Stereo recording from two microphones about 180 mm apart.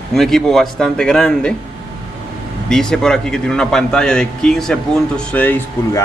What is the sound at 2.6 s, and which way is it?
A man's voice, 5° left (ahead or behind).